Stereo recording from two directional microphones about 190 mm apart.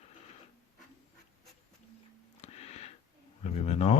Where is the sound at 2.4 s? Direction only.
35° left (ahead or behind).